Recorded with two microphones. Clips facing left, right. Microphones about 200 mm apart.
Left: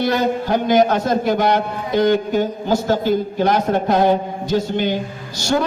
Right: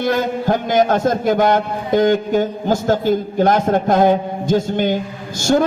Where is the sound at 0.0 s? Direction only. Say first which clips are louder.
Even; 50° right (ahead or behind).